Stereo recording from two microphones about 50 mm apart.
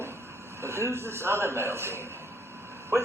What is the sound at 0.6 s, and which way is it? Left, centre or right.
A man's voice, right.